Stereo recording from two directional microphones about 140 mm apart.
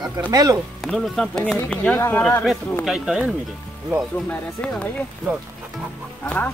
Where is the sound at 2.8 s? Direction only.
5° right (ahead or behind).